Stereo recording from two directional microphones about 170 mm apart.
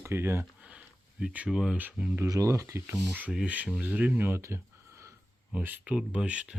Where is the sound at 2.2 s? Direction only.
20° right (ahead or behind).